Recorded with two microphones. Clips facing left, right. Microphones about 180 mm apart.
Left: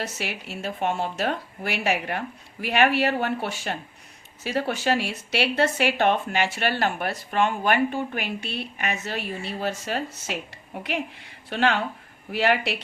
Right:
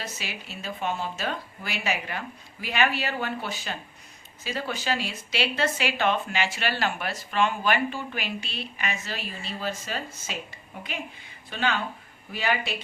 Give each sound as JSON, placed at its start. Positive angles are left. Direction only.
{"t": 0.0, "sound": "a woman's voice", "side_deg": 70}